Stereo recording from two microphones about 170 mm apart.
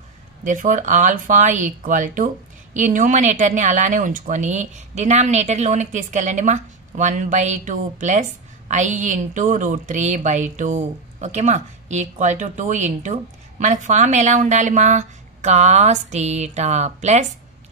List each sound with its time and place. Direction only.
0.4 s speech: 50° right (ahead or behind)